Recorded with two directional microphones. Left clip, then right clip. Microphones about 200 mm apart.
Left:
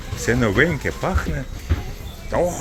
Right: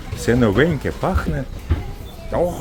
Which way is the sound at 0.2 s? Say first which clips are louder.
Right 2 dB; 25° right (ahead or behind).